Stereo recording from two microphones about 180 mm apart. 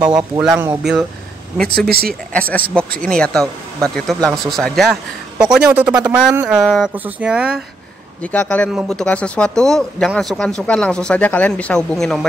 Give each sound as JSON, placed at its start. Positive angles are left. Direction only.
{"t": 0.1, "sound": "speech", "side_deg": -5}
{"t": 1.6, "sound": "speech", "side_deg": -60}
{"t": 2.3, "sound": "speech", "side_deg": 10}
{"t": 8.2, "sound": "speech", "side_deg": 5}